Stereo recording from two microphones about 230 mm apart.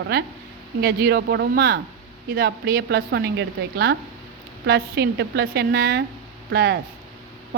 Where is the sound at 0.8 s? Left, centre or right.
Right.